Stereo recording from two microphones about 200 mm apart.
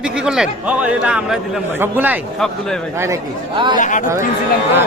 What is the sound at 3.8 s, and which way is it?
Speech, 40° left (ahead or behind).